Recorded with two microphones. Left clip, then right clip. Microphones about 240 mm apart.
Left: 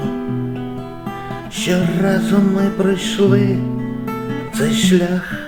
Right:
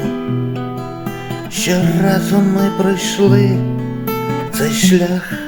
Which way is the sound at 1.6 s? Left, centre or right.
Centre.